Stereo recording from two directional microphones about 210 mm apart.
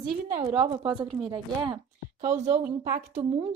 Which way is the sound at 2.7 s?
45° right (ahead or behind).